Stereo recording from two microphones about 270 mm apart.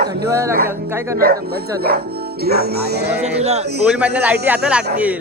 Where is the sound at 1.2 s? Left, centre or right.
Right.